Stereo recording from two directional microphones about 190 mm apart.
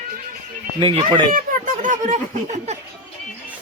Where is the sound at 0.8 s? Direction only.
25° right (ahead or behind).